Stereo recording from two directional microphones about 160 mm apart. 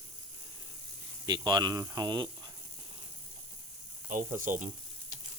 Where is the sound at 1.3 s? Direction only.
25° right (ahead or behind).